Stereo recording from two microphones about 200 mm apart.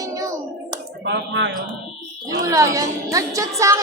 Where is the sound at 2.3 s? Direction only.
15° right (ahead or behind).